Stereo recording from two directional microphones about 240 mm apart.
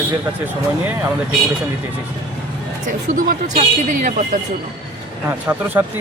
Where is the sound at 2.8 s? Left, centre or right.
Right.